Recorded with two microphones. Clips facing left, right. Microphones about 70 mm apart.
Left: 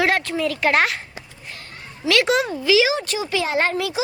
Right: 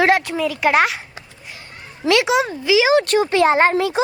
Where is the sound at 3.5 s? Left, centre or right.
Right.